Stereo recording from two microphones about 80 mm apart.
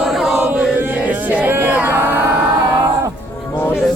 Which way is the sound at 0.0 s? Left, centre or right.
Centre.